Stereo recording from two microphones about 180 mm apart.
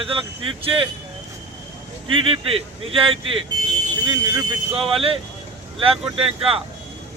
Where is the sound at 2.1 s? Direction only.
30° right (ahead or behind).